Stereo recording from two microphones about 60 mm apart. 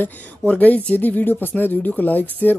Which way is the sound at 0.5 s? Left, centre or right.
Left.